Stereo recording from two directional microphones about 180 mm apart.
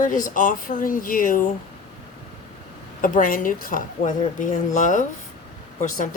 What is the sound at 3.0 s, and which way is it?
Speech, 50° left (ahead or behind).